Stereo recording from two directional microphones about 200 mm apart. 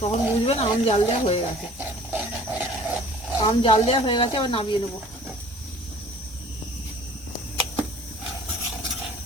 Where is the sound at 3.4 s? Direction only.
25° left (ahead or behind).